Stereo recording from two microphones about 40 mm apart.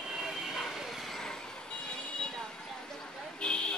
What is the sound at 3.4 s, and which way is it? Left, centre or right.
Vehicle, left.